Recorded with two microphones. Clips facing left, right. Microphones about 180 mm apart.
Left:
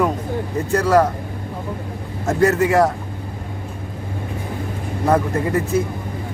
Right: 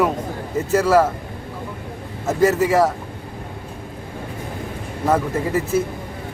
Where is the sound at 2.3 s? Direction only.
5° right (ahead or behind).